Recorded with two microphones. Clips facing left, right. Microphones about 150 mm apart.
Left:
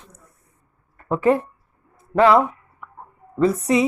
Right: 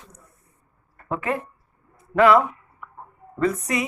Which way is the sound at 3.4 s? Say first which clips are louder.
Left 5 dB; 30° left (ahead or behind).